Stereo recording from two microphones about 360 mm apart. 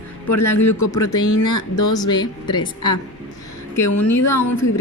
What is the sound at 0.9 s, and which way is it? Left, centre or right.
Speech, centre.